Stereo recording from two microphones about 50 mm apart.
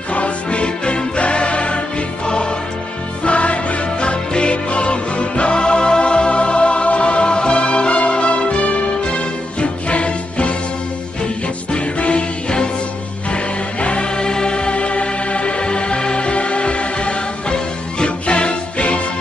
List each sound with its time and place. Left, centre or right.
0.1 s music: left
3.3 s music: left
11.7 s music: left